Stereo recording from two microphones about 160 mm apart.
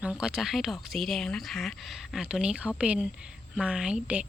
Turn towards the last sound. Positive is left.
turn(degrees=-5)  # may be behind; listen again after turning